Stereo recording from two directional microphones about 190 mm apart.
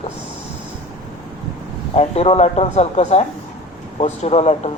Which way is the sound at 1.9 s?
35° left (ahead or behind).